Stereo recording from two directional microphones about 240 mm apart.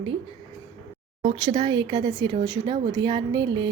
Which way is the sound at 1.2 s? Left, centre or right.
Right.